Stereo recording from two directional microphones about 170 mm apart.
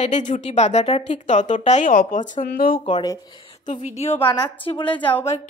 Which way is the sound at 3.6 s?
45° left (ahead or behind).